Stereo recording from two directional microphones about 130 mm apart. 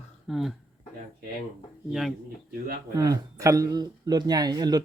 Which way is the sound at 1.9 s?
Centre (ahead or behind).